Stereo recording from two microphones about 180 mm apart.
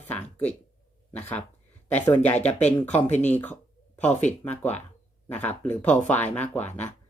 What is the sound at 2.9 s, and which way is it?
Speech, 10° left (ahead or behind).